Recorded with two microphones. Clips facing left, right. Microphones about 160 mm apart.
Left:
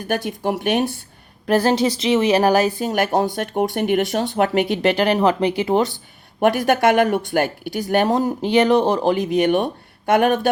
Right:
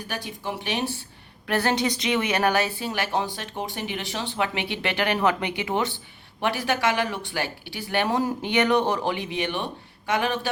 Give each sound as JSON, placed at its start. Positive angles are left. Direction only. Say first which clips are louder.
{"t": 0.0, "sound": "speech", "louder": "left 10 dB", "side_deg": 50}
{"t": 1.5, "sound": "speech", "louder": "left 7 dB", "side_deg": 35}
{"t": 6.4, "sound": "speech", "louder": "left 8 dB", "side_deg": 50}